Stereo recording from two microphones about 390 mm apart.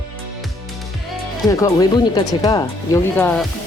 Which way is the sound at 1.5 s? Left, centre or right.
Centre.